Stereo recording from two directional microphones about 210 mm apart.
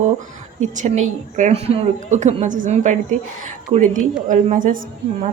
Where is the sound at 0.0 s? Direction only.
35° right (ahead or behind).